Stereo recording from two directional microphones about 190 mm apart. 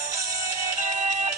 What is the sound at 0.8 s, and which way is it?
Music, 40° right (ahead or behind).